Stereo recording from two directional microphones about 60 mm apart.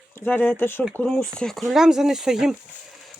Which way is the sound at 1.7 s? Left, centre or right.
Centre.